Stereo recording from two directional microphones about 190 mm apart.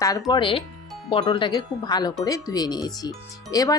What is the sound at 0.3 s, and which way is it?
Speech, 25° left (ahead or behind).